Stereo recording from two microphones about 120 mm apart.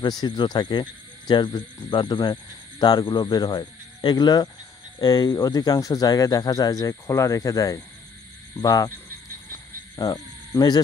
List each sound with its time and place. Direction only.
0.0 s speech: 35° left (ahead or behind)
9.5 s cricket: 30° left (ahead or behind)